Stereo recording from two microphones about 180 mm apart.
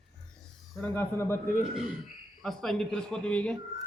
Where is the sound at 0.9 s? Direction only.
15° left (ahead or behind).